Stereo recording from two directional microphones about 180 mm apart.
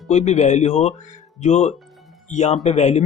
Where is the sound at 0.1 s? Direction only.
40° left (ahead or behind).